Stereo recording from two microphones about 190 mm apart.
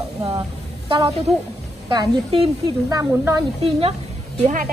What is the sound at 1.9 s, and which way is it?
A woman's voice, 25° right (ahead or behind).